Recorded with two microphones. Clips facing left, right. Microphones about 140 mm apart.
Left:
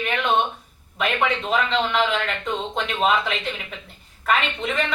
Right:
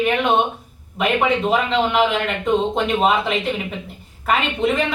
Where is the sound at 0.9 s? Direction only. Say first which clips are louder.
Right 5 dB; 5° right (ahead or behind).